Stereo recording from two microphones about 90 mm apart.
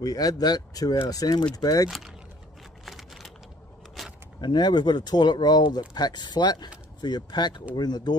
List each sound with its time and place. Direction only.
0.0 s speech: 45° left (ahead or behind)
1.9 s speech: 5° right (ahead or behind)
2.8 s a sound: centre (ahead or behind)
4.0 s vehicle: centre (ahead or behind)
4.4 s speech: 55° left (ahead or behind)